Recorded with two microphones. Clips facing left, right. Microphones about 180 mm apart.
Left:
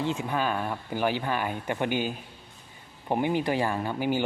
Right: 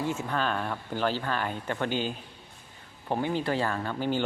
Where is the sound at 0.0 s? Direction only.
15° left (ahead or behind).